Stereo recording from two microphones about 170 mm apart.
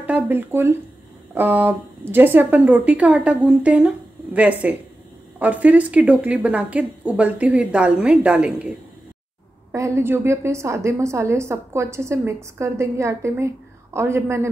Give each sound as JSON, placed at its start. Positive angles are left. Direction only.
{"t": 0.0, "sound": "a woman's voice", "side_deg": -10}
{"t": 9.7, "sound": "a woman's voice", "side_deg": -15}